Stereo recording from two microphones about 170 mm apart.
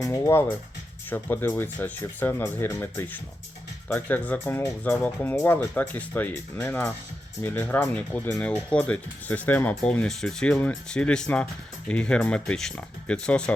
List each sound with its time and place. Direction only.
0.0 s speech: 15° left (ahead or behind)